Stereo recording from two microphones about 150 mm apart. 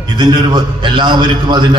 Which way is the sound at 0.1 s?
30° right (ahead or behind).